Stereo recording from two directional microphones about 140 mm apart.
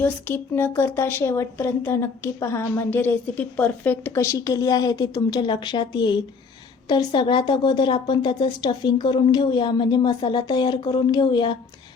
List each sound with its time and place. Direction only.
0.0 s speech: 15° left (ahead or behind); by 11.5 s 30° left (ahead or behind)